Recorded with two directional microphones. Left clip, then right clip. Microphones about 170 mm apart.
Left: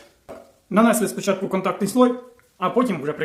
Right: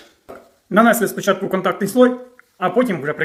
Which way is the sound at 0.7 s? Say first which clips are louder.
Right 4 dB; 10° right (ahead or behind).